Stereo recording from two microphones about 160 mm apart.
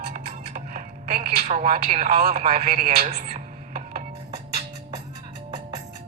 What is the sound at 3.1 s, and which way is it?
Music, 55° right (ahead or behind).